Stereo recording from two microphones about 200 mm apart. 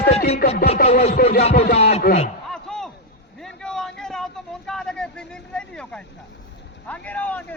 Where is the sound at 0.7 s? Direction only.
30° left (ahead or behind).